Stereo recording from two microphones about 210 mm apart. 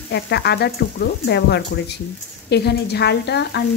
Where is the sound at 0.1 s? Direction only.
50° left (ahead or behind).